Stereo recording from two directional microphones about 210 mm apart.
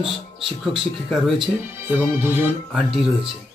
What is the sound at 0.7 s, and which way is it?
Speech, centre (ahead or behind).